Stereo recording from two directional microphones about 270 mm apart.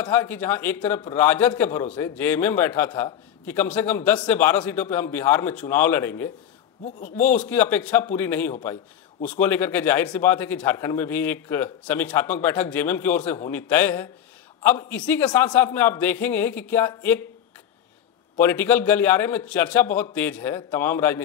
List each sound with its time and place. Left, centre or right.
0.0 s a man's voice: centre
6.8 s a man's voice: left
7.2 s a man's voice: centre
18.4 s a man's voice: centre